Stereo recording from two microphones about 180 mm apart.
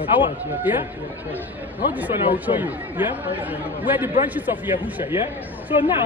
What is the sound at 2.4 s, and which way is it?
Speech, 10° right (ahead or behind).